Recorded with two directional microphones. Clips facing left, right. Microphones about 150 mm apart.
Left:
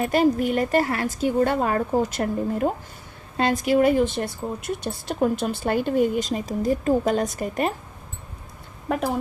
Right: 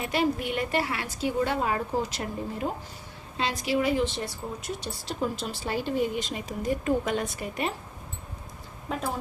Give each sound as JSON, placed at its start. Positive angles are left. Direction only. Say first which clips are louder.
{"t": 0.0, "sound": "a woman's voice", "louder": "left 7 dB", "side_deg": 45}
{"t": 8.9, "sound": "a woman's voice", "louder": "left 8 dB", "side_deg": 65}